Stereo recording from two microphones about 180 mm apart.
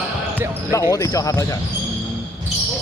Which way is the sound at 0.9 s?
20° left (ahead or behind).